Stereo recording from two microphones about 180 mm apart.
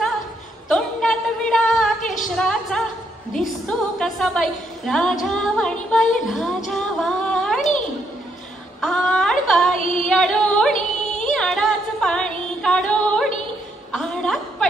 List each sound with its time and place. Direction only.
0.7 s a sound: 5° left (ahead or behind)
2.3 s a woman's voice: centre (ahead or behind)
6.7 s music: 5° left (ahead or behind)
8.8 s a sound: 5° left (ahead or behind)
10.0 s yodeling: 5° left (ahead or behind)
10.7 s yodeling: 45° left (ahead or behind)
11.3 s music: centre (ahead or behind)
12.6 s yodeling: 5° left (ahead or behind)
13.9 s a sound: 5° left (ahead or behind)